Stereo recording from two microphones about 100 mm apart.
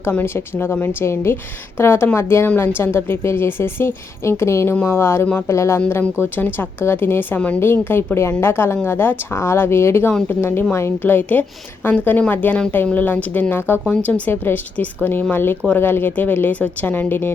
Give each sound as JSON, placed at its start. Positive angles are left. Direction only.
{"t": 0.0, "sound": "a woman's voice", "side_deg": 20}